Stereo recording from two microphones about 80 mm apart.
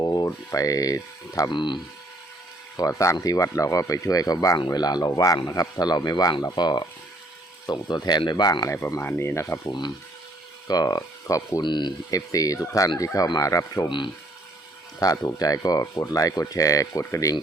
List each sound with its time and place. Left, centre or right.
0.0 s speech: left
1.5 s speech: left
2.7 s speech: left
9.0 s speech: left
10.7 s speech: left
11.6 s speech: left
12.1 s speech: left
13.8 s speech: left
14.9 s speech: left